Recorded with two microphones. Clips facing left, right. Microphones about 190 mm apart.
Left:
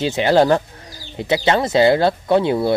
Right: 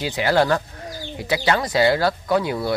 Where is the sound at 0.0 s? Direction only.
25° left (ahead or behind).